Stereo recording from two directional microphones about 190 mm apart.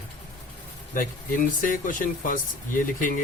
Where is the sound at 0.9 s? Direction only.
45° left (ahead or behind).